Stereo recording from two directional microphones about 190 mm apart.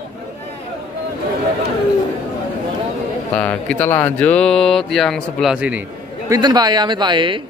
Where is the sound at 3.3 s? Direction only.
5° left (ahead or behind).